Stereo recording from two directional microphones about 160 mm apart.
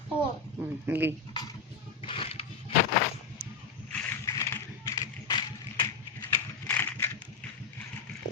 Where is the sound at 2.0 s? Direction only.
35° left (ahead or behind).